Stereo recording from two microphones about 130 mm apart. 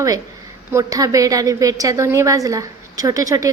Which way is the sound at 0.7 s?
25° right (ahead or behind).